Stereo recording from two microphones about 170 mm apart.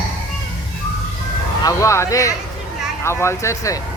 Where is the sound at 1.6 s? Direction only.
15° left (ahead or behind).